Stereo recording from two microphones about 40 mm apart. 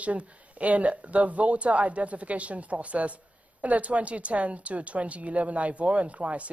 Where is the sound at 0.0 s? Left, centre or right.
Right.